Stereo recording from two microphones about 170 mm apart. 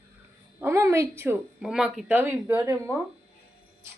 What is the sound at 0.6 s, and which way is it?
Speech, 15° right (ahead or behind).